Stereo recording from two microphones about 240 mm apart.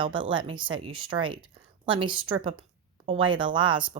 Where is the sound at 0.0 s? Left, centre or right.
Centre.